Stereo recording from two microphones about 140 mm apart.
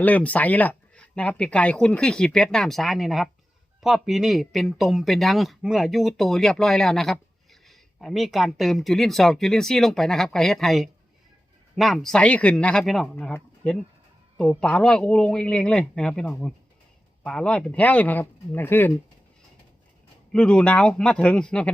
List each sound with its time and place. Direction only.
0.0 s speech: 10° left (ahead or behind)
13.1 s speech: 10° left (ahead or behind)
20.3 s speech: 5° left (ahead or behind)